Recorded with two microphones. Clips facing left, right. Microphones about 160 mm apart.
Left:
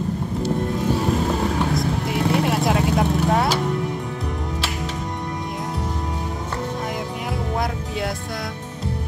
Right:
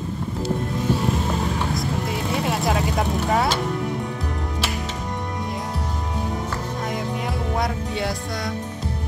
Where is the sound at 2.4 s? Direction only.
Centre (ahead or behind).